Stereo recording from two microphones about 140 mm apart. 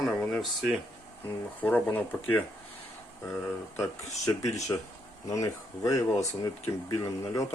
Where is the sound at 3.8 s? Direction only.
25° left (ahead or behind).